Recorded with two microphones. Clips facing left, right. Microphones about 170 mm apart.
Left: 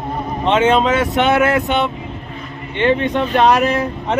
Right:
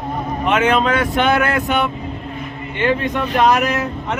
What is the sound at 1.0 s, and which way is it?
Speech, 5° left (ahead or behind).